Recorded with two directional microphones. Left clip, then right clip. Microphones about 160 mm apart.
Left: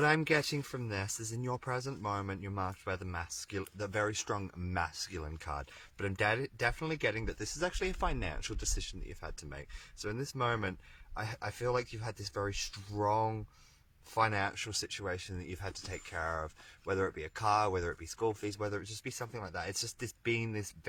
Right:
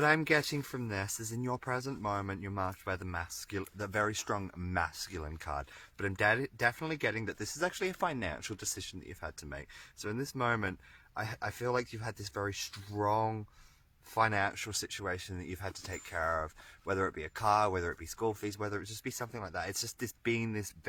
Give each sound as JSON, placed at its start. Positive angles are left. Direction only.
{"t": 0.0, "sound": "speech", "side_deg": -35}